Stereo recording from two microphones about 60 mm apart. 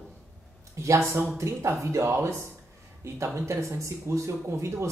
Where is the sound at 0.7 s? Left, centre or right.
Right.